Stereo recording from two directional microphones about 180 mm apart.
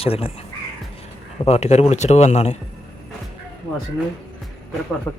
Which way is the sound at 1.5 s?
35° left (ahead or behind).